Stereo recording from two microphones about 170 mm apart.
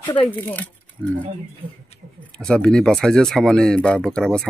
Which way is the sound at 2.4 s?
5° left (ahead or behind).